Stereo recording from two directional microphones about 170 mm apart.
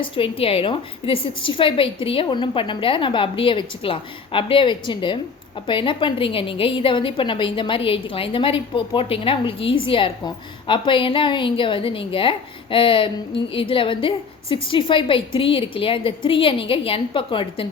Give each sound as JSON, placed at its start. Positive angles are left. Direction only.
{"t": 0.0, "sound": "a woman's voice", "side_deg": 35}